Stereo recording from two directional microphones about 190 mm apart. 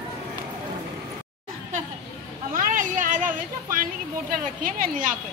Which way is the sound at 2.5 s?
45° right (ahead or behind).